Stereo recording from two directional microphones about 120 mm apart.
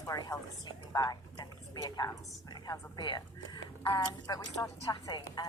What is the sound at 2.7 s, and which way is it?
A woman's voice, 40° left (ahead or behind).